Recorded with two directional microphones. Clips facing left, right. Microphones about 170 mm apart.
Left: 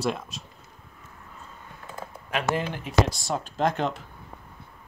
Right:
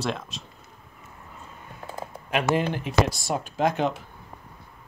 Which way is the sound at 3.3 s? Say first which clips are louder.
Right 1 dB; 10° right (ahead or behind).